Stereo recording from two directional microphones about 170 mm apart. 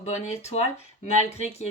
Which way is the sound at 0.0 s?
40° left (ahead or behind).